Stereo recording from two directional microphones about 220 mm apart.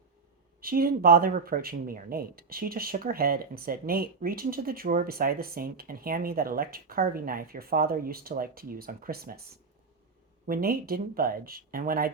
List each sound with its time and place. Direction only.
0.6 s speech: 40° right (ahead or behind)
10.4 s speech: 40° right (ahead or behind)